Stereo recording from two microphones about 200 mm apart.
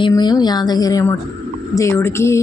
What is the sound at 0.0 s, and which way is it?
Speech, 20° left (ahead or behind).